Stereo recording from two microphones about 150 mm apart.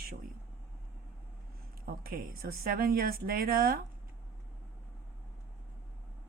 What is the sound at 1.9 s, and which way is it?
A woman's voice, 75° right (ahead or behind).